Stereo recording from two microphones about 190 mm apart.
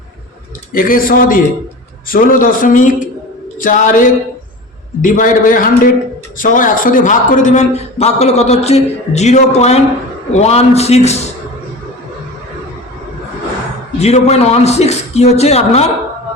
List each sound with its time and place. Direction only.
0.7 s a man's voice: 45° left (ahead or behind)
14.0 s a man's voice: 35° left (ahead or behind)